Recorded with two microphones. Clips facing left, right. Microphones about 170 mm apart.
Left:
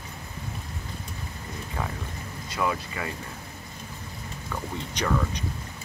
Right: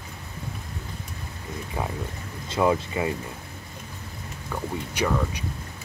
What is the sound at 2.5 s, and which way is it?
Speech, 25° right (ahead or behind).